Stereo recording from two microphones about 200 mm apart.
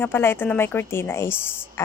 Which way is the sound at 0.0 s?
10° left (ahead or behind).